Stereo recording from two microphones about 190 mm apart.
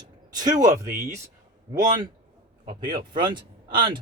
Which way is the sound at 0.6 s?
40° right (ahead or behind).